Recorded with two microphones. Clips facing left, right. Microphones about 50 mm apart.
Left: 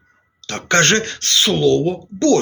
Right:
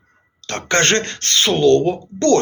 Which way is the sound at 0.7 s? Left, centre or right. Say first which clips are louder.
Left 2 dB; right.